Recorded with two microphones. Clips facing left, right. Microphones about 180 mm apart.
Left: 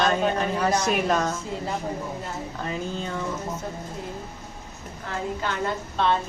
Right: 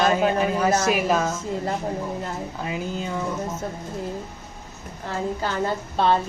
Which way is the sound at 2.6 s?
10° right (ahead or behind).